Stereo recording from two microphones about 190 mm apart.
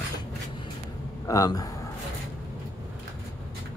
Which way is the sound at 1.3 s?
20° left (ahead or behind).